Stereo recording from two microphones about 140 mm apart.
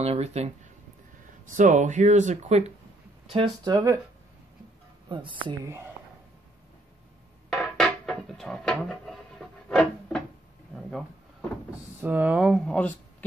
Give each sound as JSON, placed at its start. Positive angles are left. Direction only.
{"t": 0.0, "sound": "speech", "side_deg": -50}
{"t": 1.5, "sound": "speech", "side_deg": -60}
{"t": 3.6, "sound": "speech", "side_deg": -25}
{"t": 5.0, "sound": "speech", "side_deg": -35}
{"t": 7.4, "sound": "a sound", "side_deg": 5}
{"t": 12.0, "sound": "speech", "side_deg": -10}